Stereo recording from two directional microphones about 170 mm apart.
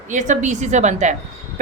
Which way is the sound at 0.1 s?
45° right (ahead or behind).